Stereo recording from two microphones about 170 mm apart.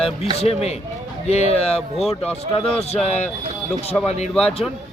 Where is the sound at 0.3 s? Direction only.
35° left (ahead or behind).